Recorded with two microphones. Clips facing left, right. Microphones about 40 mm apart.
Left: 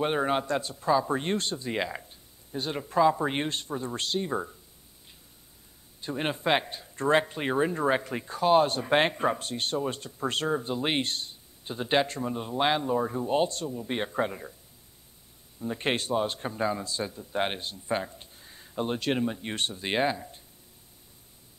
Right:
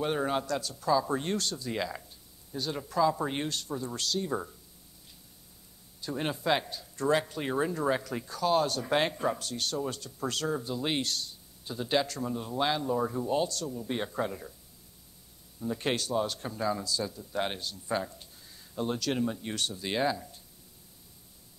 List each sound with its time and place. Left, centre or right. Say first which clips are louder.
0.0 s speech: left 3 dB; left
5.9 s speech: left 2 dB; left
15.6 s speech: left 2 dB; left